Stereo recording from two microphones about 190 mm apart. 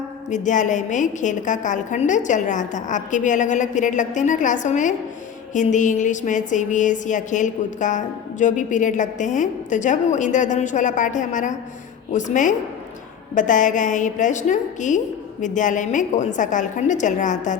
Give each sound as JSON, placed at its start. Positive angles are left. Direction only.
{"t": 0.3, "sound": "a woman's voice", "side_deg": 40}